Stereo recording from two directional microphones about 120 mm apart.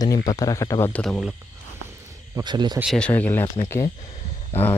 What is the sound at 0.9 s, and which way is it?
Speech, 10° left (ahead or behind).